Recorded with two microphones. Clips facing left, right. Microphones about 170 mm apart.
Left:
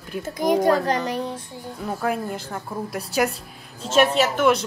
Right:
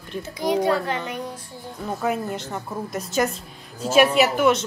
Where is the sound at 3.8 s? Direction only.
10° right (ahead or behind).